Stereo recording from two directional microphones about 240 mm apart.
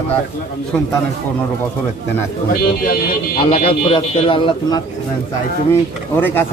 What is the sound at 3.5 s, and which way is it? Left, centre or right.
A man's voice, left.